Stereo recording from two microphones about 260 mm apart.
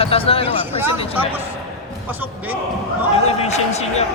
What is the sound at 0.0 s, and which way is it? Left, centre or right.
Speech, left.